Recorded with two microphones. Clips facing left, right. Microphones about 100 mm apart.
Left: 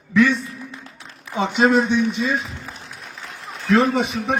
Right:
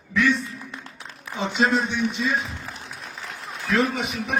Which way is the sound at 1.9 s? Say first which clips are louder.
Left 4 dB; 15° left (ahead or behind).